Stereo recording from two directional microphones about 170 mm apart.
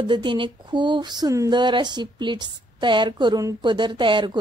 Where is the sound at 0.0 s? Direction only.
25° right (ahead or behind).